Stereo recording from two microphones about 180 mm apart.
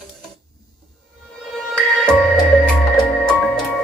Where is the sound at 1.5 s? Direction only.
5° left (ahead or behind).